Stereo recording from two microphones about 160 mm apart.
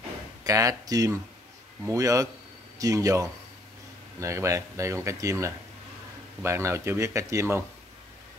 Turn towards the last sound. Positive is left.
turn(degrees=-15)  # may be behind; listen again after turning